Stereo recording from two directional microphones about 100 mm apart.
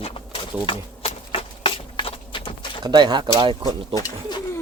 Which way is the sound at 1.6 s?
60° left (ahead or behind).